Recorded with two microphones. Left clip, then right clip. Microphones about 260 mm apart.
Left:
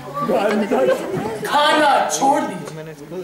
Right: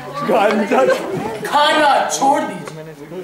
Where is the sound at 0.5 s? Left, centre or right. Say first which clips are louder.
Right 3 dB; right.